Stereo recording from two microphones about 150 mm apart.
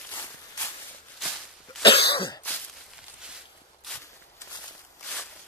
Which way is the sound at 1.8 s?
35° left (ahead or behind).